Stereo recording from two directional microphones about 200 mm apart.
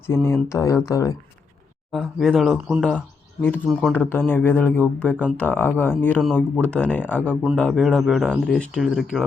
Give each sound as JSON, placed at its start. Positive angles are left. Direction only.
{"t": 0.1, "sound": "speech", "side_deg": 10}
{"t": 1.9, "sound": "speech", "side_deg": 0}